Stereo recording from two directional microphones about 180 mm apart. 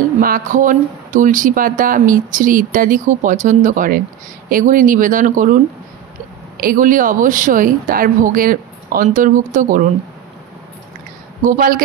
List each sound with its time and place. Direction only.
0.2 s speech: 50° right (ahead or behind)
6.6 s speech: 50° right (ahead or behind)
11.4 s speech: 50° right (ahead or behind)